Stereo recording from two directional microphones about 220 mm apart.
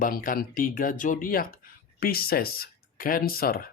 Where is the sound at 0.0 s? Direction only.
40° left (ahead or behind).